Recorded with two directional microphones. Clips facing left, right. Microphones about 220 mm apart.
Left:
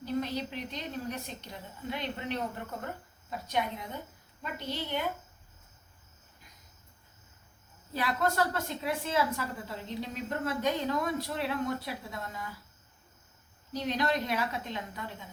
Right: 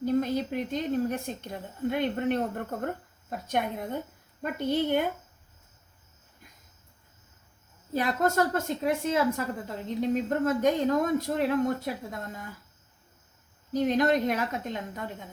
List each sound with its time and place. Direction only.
0.0 s a woman's voice: 50° right (ahead or behind)
7.9 s a woman's voice: 45° right (ahead or behind)
13.7 s a woman's voice: 50° right (ahead or behind)